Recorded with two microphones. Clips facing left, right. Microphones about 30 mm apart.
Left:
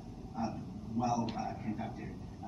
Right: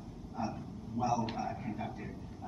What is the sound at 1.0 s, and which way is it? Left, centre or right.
Speech, centre.